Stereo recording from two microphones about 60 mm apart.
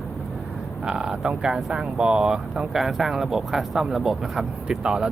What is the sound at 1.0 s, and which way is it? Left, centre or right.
Speech, centre.